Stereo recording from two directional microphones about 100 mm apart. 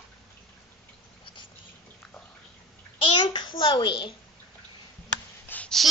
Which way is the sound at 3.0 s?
55° left (ahead or behind).